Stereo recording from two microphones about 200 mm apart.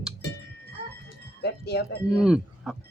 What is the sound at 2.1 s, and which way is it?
Speech, 5° right (ahead or behind).